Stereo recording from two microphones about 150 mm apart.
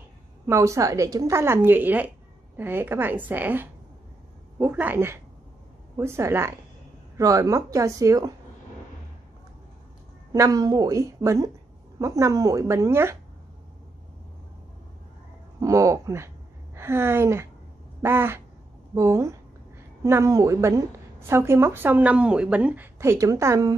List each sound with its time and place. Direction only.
0.5 s a woman's voice: 20° right (ahead or behind)
10.3 s a woman's voice: 25° right (ahead or behind)
15.6 s a woman's voice: 20° right (ahead or behind)